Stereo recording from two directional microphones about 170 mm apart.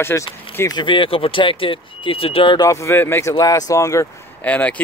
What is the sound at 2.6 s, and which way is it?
Speech, 15° left (ahead or behind).